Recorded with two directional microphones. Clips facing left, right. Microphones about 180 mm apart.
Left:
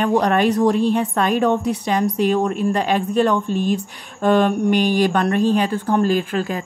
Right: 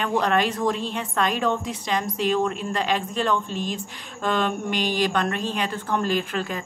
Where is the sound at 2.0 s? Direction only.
50° left (ahead or behind).